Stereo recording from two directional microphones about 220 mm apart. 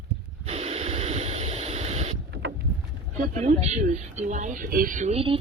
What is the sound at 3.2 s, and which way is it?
Speech, 30° right (ahead or behind).